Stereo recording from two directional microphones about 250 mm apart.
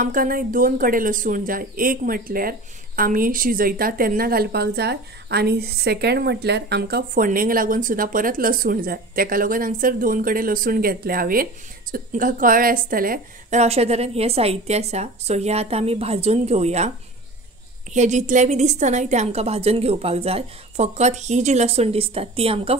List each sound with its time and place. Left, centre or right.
0.0 s a woman's voice: right
17.9 s a woman's voice: right